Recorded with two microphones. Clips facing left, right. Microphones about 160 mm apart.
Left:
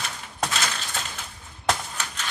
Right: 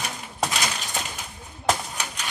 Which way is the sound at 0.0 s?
10° right (ahead or behind).